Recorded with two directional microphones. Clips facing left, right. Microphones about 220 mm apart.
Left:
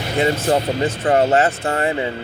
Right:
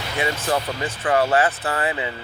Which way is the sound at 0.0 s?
35° left (ahead or behind).